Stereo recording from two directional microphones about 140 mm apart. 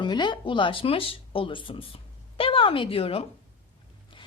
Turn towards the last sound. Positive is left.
turn(degrees=45)  # may be behind; listen again after turning